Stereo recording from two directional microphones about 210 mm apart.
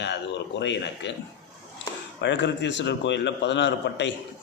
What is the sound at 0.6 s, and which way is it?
Speech, 55° left (ahead or behind).